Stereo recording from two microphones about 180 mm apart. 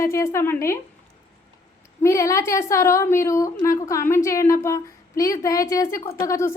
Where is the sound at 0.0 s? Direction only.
15° left (ahead or behind).